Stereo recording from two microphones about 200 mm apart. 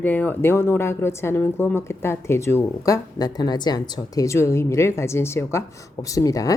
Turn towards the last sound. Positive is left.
turn(degrees=15)  # may be behind; listen again after turning